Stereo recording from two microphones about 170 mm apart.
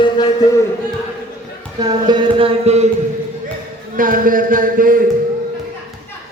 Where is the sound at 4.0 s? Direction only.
55° right (ahead or behind).